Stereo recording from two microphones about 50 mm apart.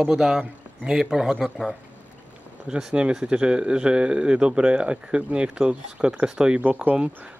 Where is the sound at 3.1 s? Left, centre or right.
Centre.